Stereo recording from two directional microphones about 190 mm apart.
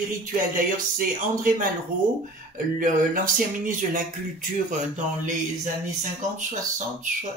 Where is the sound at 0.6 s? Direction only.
45° right (ahead or behind).